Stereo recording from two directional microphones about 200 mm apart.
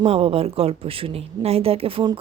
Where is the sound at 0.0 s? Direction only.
30° right (ahead or behind).